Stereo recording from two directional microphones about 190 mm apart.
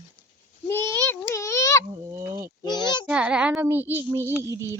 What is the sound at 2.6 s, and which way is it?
Speech, 25° left (ahead or behind).